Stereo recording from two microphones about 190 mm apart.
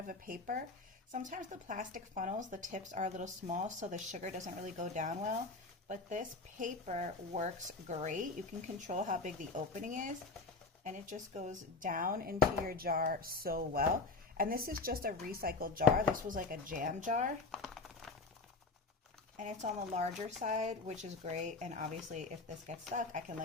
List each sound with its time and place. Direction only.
0.1 s speech: 45° right (ahead or behind)
17.5 s a sound: centre (ahead or behind)
19.4 s speech: 40° right (ahead or behind)